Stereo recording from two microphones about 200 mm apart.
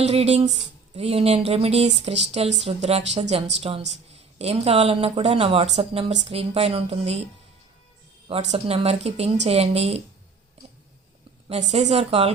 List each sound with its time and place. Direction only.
0.0 s speech: 30° right (ahead or behind)
8.3 s speech: 30° right (ahead or behind)
11.7 s speech: 30° right (ahead or behind)